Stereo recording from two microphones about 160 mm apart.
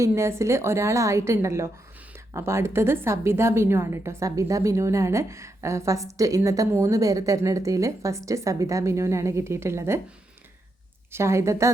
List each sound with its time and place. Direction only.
0.0 s a woman's voice: 15° right (ahead or behind)
11.1 s a woman's voice: 15° right (ahead or behind)